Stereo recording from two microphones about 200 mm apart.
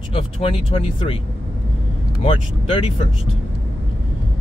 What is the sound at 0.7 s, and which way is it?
Speech, 25° left (ahead or behind).